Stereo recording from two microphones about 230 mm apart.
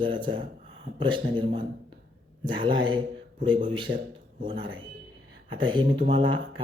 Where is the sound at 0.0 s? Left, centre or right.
Right.